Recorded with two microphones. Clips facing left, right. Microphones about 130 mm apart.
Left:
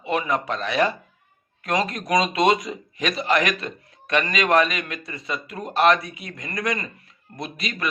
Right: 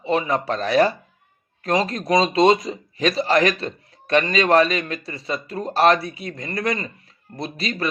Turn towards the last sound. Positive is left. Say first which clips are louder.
# right 4 dB
turn(degrees=-30)  # may be behind; listen again after turning